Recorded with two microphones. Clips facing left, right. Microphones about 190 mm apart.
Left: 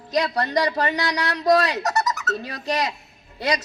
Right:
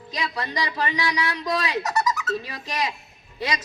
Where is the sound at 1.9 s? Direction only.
65° left (ahead or behind).